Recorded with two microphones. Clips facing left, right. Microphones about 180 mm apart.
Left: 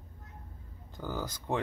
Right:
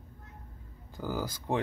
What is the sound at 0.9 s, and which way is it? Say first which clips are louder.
Speech: right 3 dB; 10° right (ahead or behind).